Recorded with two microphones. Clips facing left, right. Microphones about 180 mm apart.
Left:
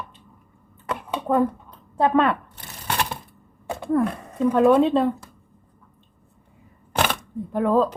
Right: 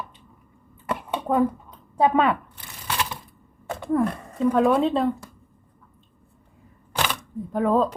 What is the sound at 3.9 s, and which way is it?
Speech, centre (ahead or behind).